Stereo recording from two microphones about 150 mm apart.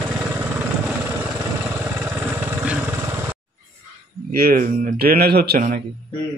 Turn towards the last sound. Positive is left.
turn(degrees=-90)